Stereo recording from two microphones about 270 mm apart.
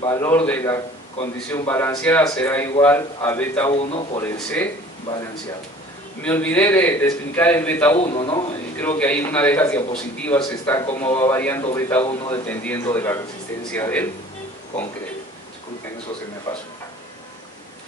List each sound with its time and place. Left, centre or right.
0.0 s a man's voice: centre
3.7 s a man's voice: left
4.2 s a man's voice: centre
6.2 s a man's voice: centre
8.0 s a man's voice: left
8.7 s a man's voice: centre